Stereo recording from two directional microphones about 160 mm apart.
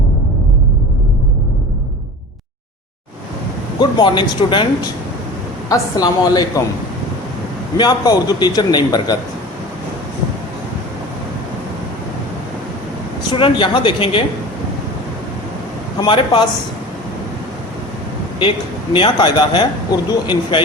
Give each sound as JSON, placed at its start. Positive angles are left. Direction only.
{"t": 3.8, "sound": "speech", "side_deg": 30}
{"t": 7.8, "sound": "speech", "side_deg": 25}
{"t": 13.3, "sound": "speech", "side_deg": 30}
{"t": 16.0, "sound": "speech", "side_deg": 30}
{"t": 18.9, "sound": "speech", "side_deg": 30}